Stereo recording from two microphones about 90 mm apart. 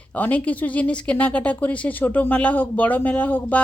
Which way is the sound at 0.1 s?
15° left (ahead or behind).